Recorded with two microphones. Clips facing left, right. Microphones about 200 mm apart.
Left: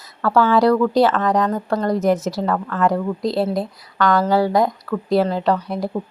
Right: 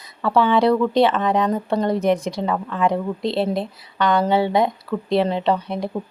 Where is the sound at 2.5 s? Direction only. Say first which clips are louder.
Left 2 dB; 15° right (ahead or behind).